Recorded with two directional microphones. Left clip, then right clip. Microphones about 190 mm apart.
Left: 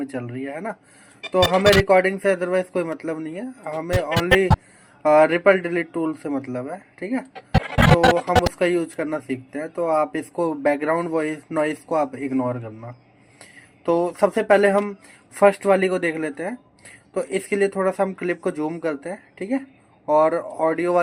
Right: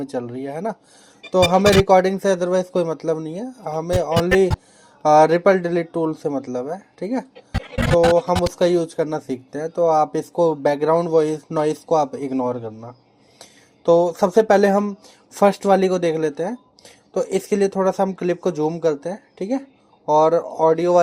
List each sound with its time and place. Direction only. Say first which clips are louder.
0.0 s a man's voice: right 3 dB; 30° right (ahead or behind)
4.3 s a man's voice: right 1 dB; centre (ahead or behind)
5.0 s a man's voice: right 2 dB; 30° right (ahead or behind)
8.5 s a man's voice: right 3 dB; 30° right (ahead or behind)